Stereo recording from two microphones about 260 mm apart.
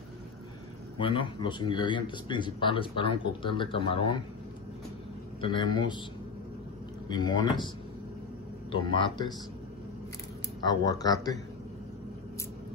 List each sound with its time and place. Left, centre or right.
0.9 s speech: centre
5.4 s speech: centre
7.1 s speech: centre
8.7 s speech: centre
10.6 s speech: centre